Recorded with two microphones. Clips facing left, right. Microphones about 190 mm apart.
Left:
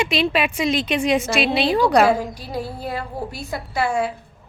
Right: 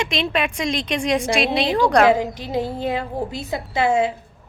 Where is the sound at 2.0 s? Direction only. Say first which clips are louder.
Right 2 dB; 20° right (ahead or behind).